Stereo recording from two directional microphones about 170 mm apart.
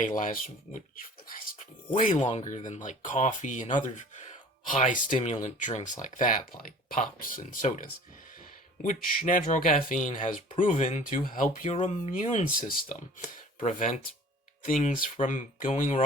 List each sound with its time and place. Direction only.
0.2 s speech: 50° left (ahead or behind)
2.0 s speech: 45° left (ahead or behind)
11.6 s speech: 40° left (ahead or behind); by 13.4 s 55° left (ahead or behind)
13.6 s speech: 45° left (ahead or behind)